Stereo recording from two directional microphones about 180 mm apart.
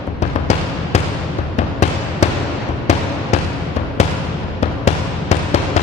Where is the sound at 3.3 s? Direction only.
35° left (ahead or behind).